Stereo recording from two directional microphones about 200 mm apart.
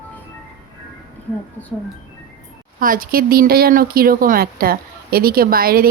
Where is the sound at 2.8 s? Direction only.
45° right (ahead or behind).